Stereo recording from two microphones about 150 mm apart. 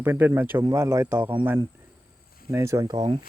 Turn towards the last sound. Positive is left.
turn(degrees=-20)  # may be behind; listen again after turning